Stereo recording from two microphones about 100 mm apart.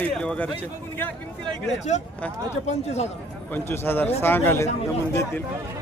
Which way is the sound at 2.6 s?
90° left.